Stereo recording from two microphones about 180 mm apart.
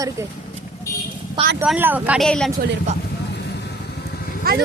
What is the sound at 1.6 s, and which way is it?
Speech, 5° right (ahead or behind).